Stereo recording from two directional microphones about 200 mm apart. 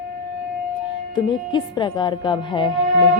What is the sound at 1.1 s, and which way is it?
A woman's voice, 20° left (ahead or behind).